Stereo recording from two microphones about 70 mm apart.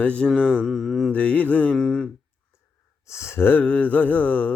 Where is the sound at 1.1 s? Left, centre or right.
Centre.